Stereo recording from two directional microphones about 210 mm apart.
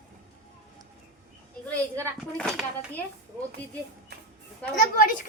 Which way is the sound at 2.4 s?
5° left (ahead or behind).